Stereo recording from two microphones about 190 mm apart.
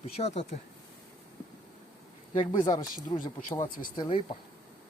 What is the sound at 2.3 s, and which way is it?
Speech, 25° left (ahead or behind).